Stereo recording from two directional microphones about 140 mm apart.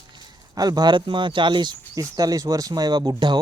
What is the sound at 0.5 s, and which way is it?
Speech, 30° right (ahead or behind).